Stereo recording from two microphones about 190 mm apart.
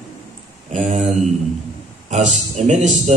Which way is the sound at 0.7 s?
40° right (ahead or behind).